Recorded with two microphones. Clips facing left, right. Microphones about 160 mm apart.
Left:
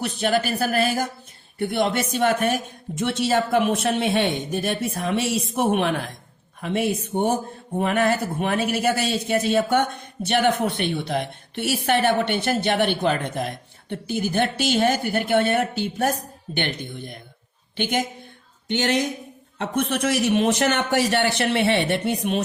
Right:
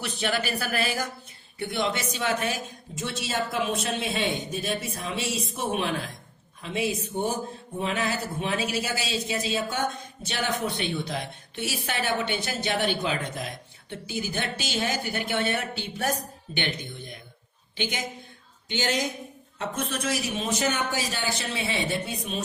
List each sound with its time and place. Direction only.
0.0 s a woman's voice: 45° left (ahead or behind)
3.0 s a woman's voice: 65° left (ahead or behind)